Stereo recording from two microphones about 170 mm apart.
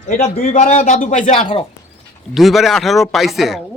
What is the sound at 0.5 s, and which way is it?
Speech, 45° left (ahead or behind).